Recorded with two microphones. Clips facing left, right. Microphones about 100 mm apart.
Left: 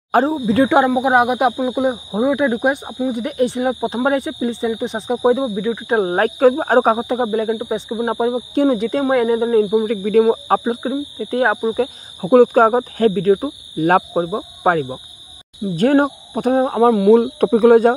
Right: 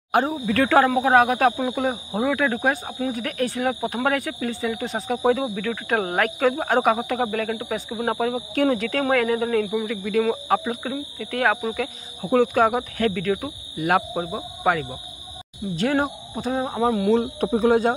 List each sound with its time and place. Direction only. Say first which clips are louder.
0.1 s speech: left 6 dB; 35° left (ahead or behind)
0.5 s speech: left 2 dB; 20° left (ahead or behind)
6.1 s speech: left 8 dB; 35° left (ahead or behind)
9.6 s speech: left 8 dB; 35° left (ahead or behind)
11.7 s speech: left 8 dB; 35° left (ahead or behind)